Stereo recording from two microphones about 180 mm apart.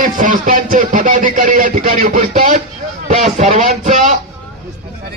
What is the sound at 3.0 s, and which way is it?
Speech, 35° right (ahead or behind).